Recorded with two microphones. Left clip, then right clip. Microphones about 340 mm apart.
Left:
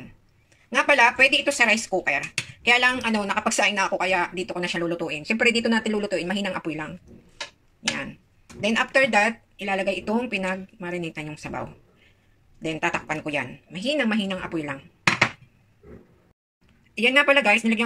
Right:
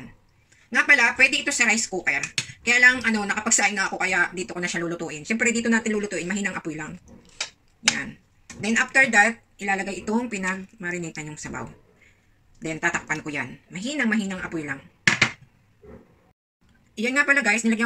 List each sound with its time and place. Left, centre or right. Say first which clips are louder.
0.7 s speech: even; centre
8.5 s speech: right 1 dB; centre
12.6 s speech: even; centre
16.9 s speech: left 3 dB; centre